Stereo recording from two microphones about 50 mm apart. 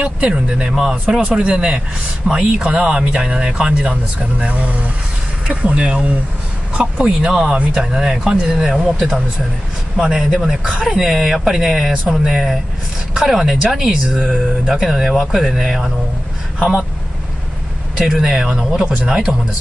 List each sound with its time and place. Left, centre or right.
0.0 s speech: centre
16.5 s speech: centre
17.9 s speech: centre